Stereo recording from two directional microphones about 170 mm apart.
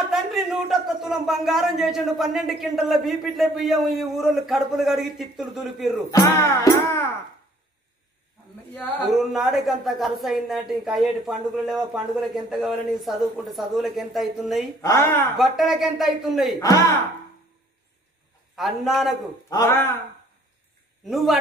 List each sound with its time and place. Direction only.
0.1 s speech: centre (ahead or behind)
6.1 s music: 20° left (ahead or behind)
9.1 s speech: centre (ahead or behind)
14.8 s music: 15° left (ahead or behind)
15.3 s speech: centre (ahead or behind)
16.5 s speech: 20° left (ahead or behind)
18.6 s speech: centre (ahead or behind)
19.5 s music: 15° left (ahead or behind)
21.0 s a man's voice: centre (ahead or behind)